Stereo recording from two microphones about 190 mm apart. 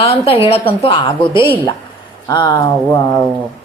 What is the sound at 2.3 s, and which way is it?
Speech, 20° left (ahead or behind).